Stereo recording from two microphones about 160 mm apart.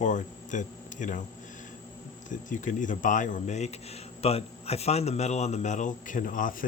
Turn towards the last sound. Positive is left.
turn(degrees=60)  # may be behind; listen again after turning